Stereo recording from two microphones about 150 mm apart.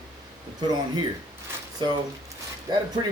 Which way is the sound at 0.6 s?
25° right (ahead or behind).